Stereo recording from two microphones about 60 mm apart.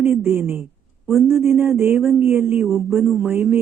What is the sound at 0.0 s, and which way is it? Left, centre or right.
Speech, right.